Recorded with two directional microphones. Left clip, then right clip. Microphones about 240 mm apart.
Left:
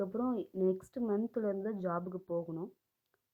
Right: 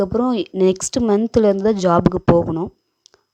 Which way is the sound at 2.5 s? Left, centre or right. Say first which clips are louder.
Right 19 dB; right.